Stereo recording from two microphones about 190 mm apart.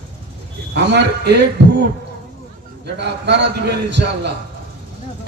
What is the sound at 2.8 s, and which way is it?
A man's voice, 65° right (ahead or behind).